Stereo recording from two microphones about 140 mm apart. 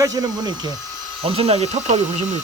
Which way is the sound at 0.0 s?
25° right (ahead or behind).